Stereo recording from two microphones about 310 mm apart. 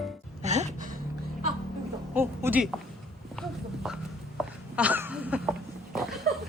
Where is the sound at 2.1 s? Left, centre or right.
Centre.